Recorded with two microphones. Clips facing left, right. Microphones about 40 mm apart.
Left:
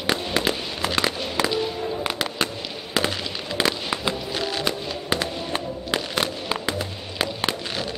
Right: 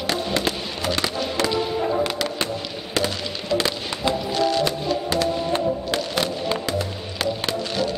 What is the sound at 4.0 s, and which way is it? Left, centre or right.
Music, centre.